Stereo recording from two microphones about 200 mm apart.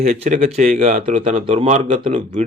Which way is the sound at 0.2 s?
30° right (ahead or behind).